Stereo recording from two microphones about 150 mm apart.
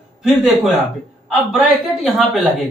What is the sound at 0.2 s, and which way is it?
Speech, centre (ahead or behind).